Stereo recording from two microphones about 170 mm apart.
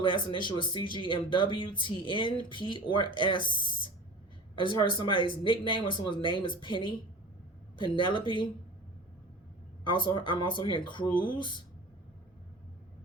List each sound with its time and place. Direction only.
0.0 s speech: 30° left (ahead or behind)
7.8 s speech: 30° left (ahead or behind)
9.8 s speech: 30° left (ahead or behind)